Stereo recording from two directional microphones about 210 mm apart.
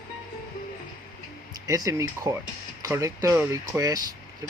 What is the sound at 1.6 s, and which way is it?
Speech, 15° right (ahead or behind).